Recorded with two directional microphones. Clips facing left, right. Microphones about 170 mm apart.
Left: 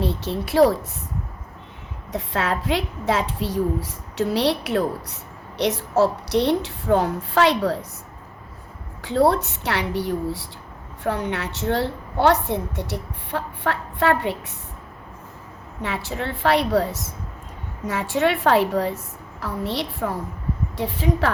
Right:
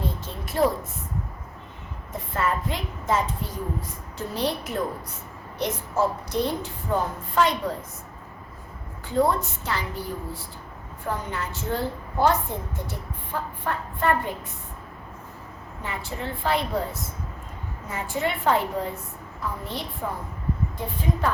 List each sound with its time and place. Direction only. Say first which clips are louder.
0.0 s speech: left 7 dB; 75° left (ahead or behind)
2.1 s a woman's voice: left 2 dB; 80° left
9.0 s a woman's voice: left 4 dB; 75° left (ahead or behind)
15.8 s a woman's voice: left 5 dB; 80° left